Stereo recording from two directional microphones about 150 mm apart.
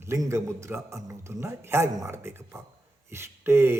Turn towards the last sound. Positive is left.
turn(degrees=-15)  # may be behind; listen again after turning